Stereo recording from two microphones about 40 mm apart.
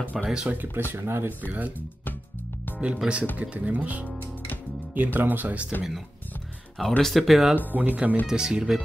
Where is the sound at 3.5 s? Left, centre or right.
Right.